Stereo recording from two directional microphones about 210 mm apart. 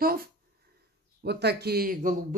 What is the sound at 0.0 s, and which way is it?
Speech, 45° right (ahead or behind).